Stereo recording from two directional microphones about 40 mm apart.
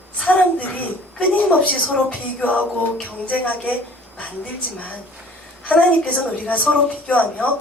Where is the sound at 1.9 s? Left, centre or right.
Left.